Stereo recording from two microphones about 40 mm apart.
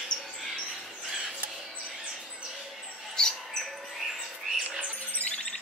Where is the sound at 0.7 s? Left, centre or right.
Centre.